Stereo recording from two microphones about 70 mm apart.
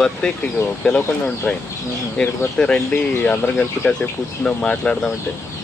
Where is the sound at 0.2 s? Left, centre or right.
Centre.